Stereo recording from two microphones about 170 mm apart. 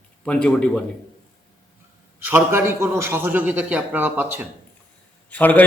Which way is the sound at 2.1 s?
10° right (ahead or behind).